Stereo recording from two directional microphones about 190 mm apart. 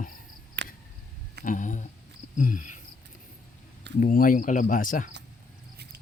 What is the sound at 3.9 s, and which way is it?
Speech, 45° left (ahead or behind).